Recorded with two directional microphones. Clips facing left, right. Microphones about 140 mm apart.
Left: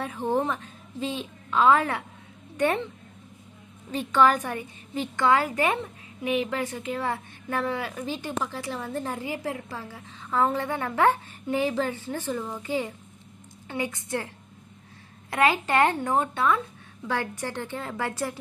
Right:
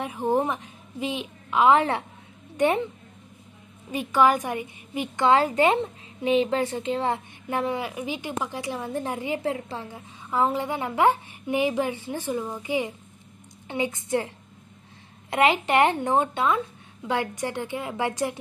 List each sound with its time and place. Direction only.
0.0 s a woman's voice: 15° right (ahead or behind)
3.9 s a woman's voice: 10° right (ahead or behind)